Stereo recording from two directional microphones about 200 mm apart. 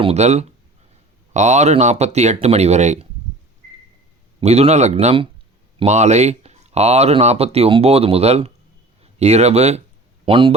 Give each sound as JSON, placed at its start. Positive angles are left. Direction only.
{"t": 0.0, "sound": "speech", "side_deg": -35}
{"t": 4.4, "sound": "speech", "side_deg": -30}